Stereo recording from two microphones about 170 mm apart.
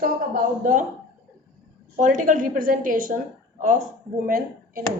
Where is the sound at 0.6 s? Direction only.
50° right (ahead or behind).